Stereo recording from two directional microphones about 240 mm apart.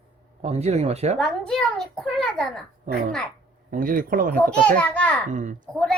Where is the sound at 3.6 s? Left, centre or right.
Right.